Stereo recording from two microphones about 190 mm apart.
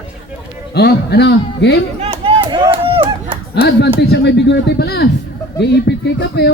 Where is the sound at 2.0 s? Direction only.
30° right (ahead or behind).